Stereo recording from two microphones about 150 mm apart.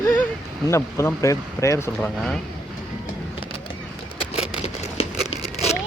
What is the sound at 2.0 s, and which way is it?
Speech, 5° left (ahead or behind).